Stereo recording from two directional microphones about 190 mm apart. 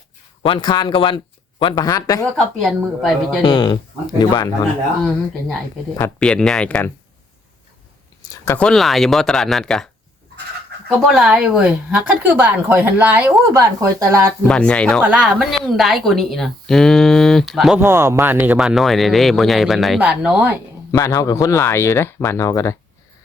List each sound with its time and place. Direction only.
0.4 s speech: 25° left (ahead or behind)
2.3 s speech: centre (ahead or behind)
3.4 s speech: 25° left (ahead or behind)
6.1 s speech: 5° left (ahead or behind)
8.2 s a sound: 15° left (ahead or behind)
8.5 s speech: centre (ahead or behind); by 14.3 s 15° right (ahead or behind)
14.4 s speech: 5° left (ahead or behind)
17.7 s speech: 15° right (ahead or behind)
20.9 s speech: 20° left (ahead or behind)